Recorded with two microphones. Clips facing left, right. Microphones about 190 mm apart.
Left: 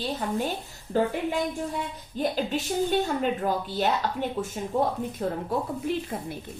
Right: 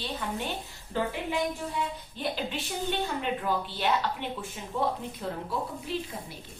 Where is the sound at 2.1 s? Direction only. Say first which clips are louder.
Left 7 dB; 45° left (ahead or behind).